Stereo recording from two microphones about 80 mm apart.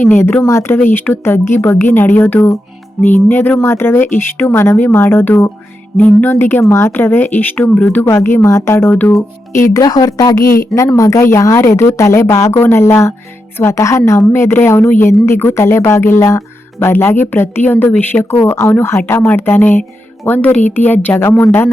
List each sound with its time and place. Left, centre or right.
0.1 s a woman's voice: left
0.4 s a woman's voice: left
0.8 s a woman's voice: left
6.3 s a woman's voice: left
8.0 s a woman's voice: left
9.8 s a woman's voice: left